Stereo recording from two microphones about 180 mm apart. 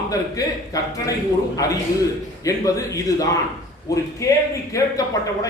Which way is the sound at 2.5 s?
20° left (ahead or behind).